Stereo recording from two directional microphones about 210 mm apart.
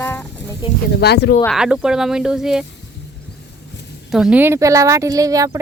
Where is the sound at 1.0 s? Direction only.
50° left (ahead or behind).